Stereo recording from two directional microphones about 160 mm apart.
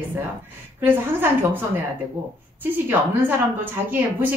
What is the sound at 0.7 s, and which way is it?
Speech, 10° right (ahead or behind).